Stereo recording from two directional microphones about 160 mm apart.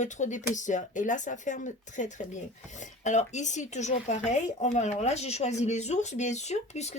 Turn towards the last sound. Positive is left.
turn(degrees=45)  # may be behind; listen again after turning